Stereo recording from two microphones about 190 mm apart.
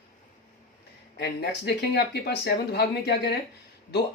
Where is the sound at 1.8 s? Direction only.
60° left (ahead or behind).